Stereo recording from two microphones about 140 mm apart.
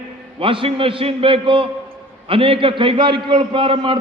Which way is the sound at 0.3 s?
40° right (ahead or behind).